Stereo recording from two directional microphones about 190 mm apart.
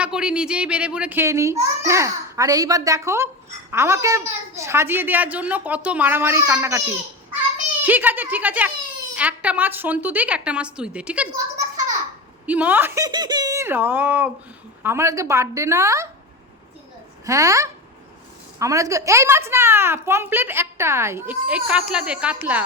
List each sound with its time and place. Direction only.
0.0 s a woman's voice: 5° right (ahead or behind)
7.9 s a child's voice: 10° right (ahead or behind)
12.5 s a child's voice: 10° right (ahead or behind)
17.2 s a child's voice: 15° right (ahead or behind)